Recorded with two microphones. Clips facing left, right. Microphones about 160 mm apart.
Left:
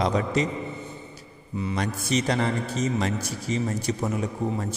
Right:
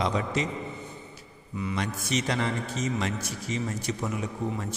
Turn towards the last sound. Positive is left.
turn(degrees=40)  # may be behind; listen again after turning